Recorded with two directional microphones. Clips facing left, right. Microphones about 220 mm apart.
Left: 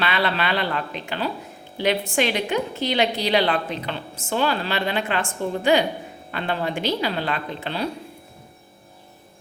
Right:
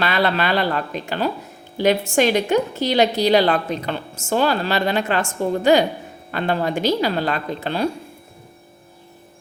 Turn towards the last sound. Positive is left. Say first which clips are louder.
# right 5 dB
turn(degrees=-45)  # may be behind; listen again after turning